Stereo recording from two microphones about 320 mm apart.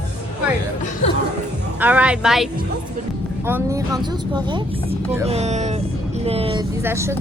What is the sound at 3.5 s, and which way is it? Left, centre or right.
Speech, centre.